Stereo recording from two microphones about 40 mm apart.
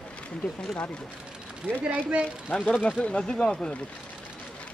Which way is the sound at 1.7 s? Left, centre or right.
Left.